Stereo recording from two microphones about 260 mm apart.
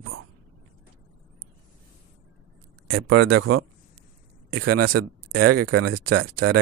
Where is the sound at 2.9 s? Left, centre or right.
Right.